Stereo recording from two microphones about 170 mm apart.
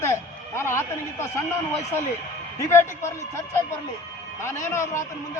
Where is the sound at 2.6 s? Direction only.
15° left (ahead or behind).